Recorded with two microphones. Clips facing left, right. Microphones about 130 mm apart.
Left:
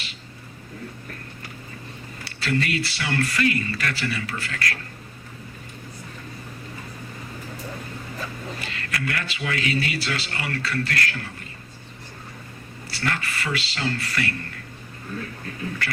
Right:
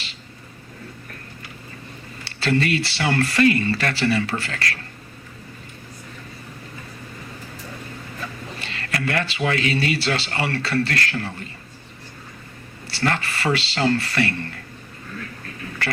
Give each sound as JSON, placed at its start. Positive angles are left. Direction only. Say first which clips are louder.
{"t": 2.2, "sound": "speech", "louder": "right 4 dB", "side_deg": -30}
{"t": 8.6, "sound": "music", "louder": "right 5 dB", "side_deg": -30}
{"t": 9.5, "sound": "speech", "louder": "right 2 dB", "side_deg": -30}
{"t": 12.9, "sound": "speech", "louder": "right 5 dB", "side_deg": -30}
{"t": 15.8, "sound": "speech", "louder": "right 7 dB", "side_deg": -30}